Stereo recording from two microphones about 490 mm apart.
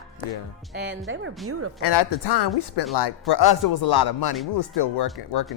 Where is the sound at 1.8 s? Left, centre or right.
Left.